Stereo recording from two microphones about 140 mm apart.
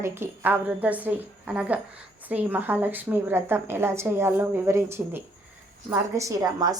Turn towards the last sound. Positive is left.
turn(degrees=-25)  # may be behind; listen again after turning